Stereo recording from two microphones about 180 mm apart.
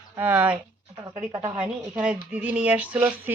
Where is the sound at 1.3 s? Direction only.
35° right (ahead or behind).